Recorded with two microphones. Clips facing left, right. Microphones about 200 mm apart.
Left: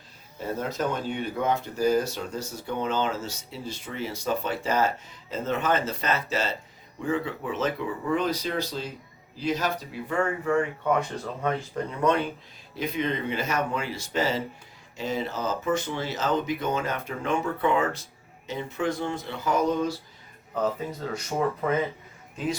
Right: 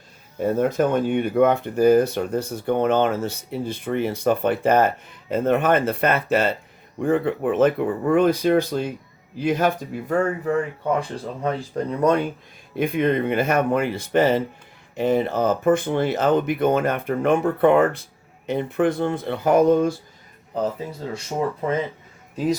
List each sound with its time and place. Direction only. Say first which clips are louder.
0.3 s speech: right 10 dB; 55° right (ahead or behind)
11.4 s speech: right 4 dB; 40° right (ahead or behind)
12.7 s speech: right 8 dB; 55° right (ahead or behind)
21.1 s speech: right 2 dB; 25° right (ahead or behind)